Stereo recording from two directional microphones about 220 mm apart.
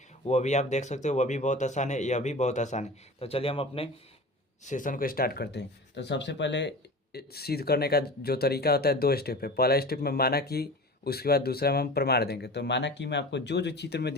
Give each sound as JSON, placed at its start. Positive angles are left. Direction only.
{"t": 0.3, "sound": "speech", "side_deg": 30}
{"t": 4.6, "sound": "speech", "side_deg": 35}